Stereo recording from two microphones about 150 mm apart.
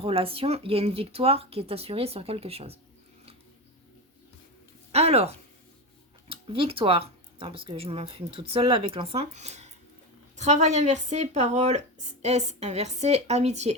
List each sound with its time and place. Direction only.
0.0 s speech: 40° right (ahead or behind)
4.9 s a sound: 45° right (ahead or behind)
6.2 s speech: 35° right (ahead or behind)